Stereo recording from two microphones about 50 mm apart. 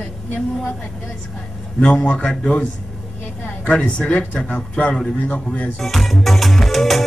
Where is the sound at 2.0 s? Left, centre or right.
Centre.